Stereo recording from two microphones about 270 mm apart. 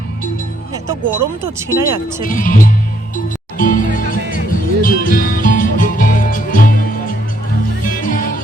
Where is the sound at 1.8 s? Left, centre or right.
Centre.